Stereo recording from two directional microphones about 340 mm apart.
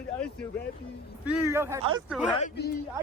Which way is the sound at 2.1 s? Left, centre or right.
Centre.